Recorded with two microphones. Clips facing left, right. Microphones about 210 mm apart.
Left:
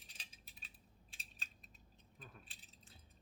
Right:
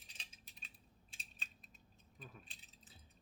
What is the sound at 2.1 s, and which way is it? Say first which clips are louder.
Keys jangling: right 2 dB; centre (ahead or behind).